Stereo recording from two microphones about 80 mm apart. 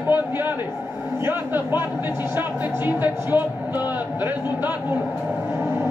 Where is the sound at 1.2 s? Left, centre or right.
Right.